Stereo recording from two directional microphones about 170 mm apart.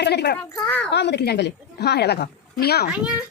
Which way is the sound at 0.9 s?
80° left.